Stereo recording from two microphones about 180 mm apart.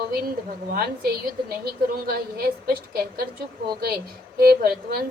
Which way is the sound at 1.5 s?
55° right (ahead or behind).